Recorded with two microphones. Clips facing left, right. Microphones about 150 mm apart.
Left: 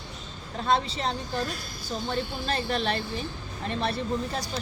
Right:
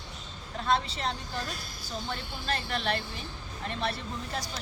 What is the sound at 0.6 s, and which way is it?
A woman's voice, 30° left (ahead or behind).